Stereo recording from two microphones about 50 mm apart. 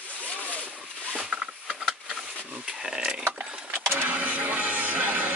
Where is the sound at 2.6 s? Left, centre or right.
Centre.